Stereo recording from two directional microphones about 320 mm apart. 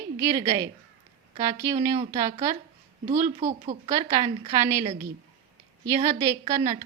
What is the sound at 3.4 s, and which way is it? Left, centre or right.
A woman's voice, right.